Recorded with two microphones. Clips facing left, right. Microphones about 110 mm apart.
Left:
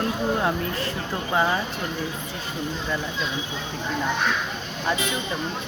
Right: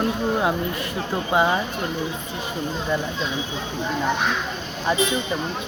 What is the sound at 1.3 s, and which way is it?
Speech, 15° right (ahead or behind).